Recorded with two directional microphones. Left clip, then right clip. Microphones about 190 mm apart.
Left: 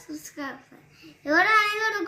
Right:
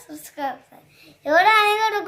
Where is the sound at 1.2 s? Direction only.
40° right (ahead or behind).